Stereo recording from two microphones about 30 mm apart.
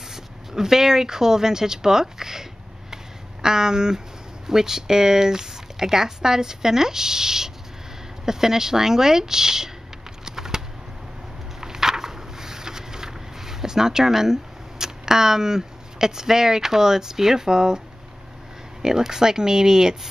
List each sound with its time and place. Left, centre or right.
0.1 s speech: centre
3.4 s speech: right
10.2 s typing: centre
11.6 s a sound: centre
18.8 s speech: centre